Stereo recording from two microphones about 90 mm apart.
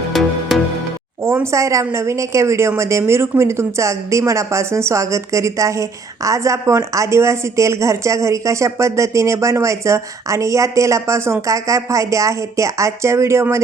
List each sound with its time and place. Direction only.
0.1 s music: centre (ahead or behind)
1.2 s speech: 30° right (ahead or behind)